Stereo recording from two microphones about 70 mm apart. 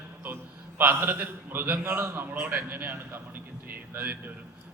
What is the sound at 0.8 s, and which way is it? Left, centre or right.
A man's voice, right.